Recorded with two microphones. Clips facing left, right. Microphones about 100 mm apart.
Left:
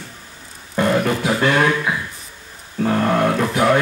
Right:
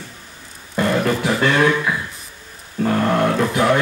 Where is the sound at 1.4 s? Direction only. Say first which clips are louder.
Even; 20° left (ahead or behind).